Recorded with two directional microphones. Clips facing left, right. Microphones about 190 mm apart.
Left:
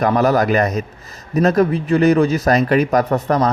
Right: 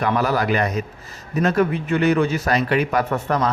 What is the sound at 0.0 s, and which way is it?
A man's voice, 40° left (ahead or behind).